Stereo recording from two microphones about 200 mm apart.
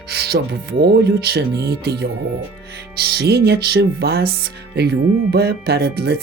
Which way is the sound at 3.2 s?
55° right (ahead or behind).